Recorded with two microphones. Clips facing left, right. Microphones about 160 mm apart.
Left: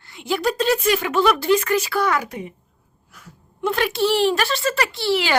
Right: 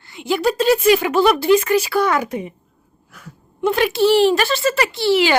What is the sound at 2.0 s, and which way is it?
Speech, 25° right (ahead or behind).